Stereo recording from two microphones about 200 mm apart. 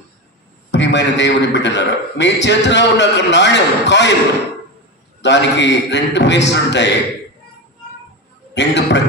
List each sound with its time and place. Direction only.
0.7 s a man's voice: 60° left (ahead or behind)
5.2 s a man's voice: 60° left (ahead or behind)
8.5 s a man's voice: 60° left (ahead or behind)